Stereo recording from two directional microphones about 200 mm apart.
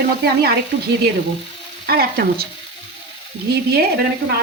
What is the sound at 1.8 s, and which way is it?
Speech, 50° right (ahead or behind).